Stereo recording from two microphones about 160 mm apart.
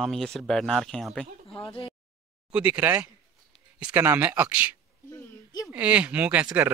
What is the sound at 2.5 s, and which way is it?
Speech, 10° right (ahead or behind).